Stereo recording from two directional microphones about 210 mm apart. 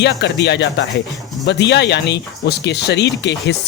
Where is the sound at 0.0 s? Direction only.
55° left (ahead or behind).